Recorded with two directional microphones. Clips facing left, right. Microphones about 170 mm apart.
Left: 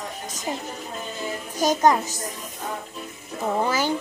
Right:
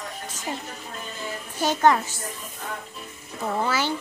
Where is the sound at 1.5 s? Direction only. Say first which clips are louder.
Left 1 dB; 40° left (ahead or behind).